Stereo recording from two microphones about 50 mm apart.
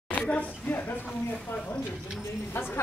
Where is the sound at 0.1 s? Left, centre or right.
Left.